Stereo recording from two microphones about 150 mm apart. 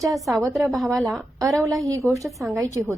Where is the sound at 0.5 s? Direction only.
Centre (ahead or behind).